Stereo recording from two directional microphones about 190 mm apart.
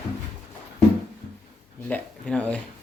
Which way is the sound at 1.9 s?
5° left (ahead or behind).